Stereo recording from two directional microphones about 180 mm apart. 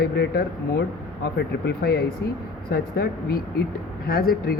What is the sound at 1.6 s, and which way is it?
Speech, 60° left (ahead or behind).